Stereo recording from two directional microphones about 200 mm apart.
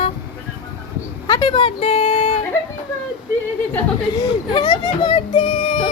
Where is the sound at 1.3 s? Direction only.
20° left (ahead or behind); by 2.4 s 35° left (ahead or behind).